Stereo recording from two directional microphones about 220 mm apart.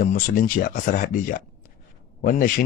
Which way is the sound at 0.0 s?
35° left (ahead or behind).